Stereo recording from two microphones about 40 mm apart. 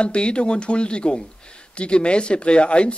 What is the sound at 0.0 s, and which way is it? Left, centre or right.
Speech, left.